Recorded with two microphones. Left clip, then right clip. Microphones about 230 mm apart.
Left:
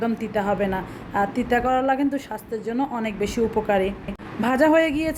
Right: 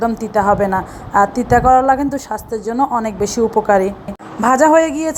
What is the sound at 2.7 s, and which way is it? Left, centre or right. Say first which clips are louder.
A woman's voice: right 10 dB; centre.